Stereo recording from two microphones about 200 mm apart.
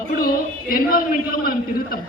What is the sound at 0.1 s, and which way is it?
A man's voice, 45° left (ahead or behind).